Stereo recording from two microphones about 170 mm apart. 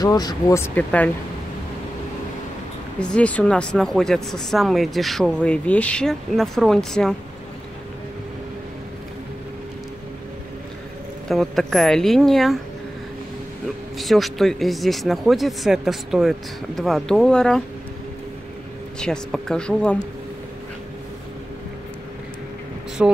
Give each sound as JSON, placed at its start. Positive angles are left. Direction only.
{"t": 0.0, "sound": "speech", "side_deg": 25}
{"t": 3.0, "sound": "speech", "side_deg": 5}
{"t": 11.2, "sound": "speech", "side_deg": 0}
{"t": 13.9, "sound": "speech", "side_deg": 0}
{"t": 18.9, "sound": "speech", "side_deg": 5}
{"t": 23.0, "sound": "speech", "side_deg": -5}